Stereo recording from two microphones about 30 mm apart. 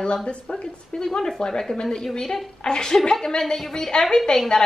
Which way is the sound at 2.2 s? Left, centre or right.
Centre.